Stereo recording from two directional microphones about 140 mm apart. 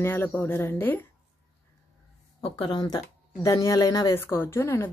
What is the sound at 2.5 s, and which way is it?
Speech, 30° left (ahead or behind).